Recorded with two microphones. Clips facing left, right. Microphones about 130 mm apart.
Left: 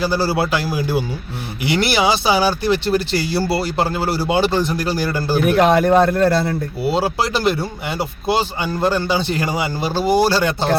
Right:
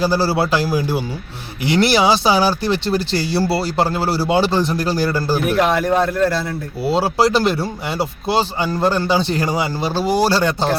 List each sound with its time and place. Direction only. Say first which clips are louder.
0.0 s a man's voice: right 1 dB; 35° right (ahead or behind)
5.3 s a man's voice: left 5 dB; centre (ahead or behind)
6.9 s a man's voice: right 5 dB; 35° right (ahead or behind)